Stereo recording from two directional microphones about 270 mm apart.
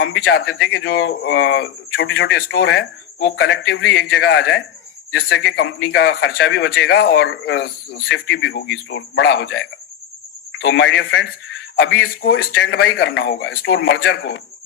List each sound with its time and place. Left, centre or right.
0.0 s speech: left